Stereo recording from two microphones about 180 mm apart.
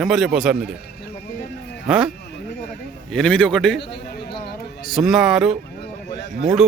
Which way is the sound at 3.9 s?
70° left (ahead or behind).